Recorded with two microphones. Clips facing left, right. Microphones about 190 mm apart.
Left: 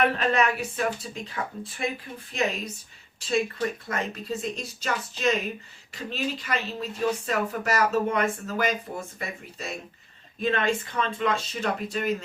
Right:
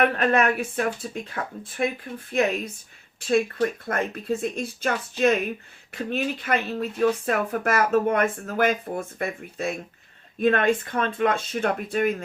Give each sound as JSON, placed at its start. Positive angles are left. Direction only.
{"t": 0.2, "sound": "speech", "side_deg": -55}